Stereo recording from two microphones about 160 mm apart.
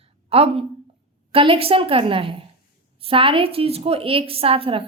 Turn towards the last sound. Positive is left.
turn(degrees=-35)  # may be behind; listen again after turning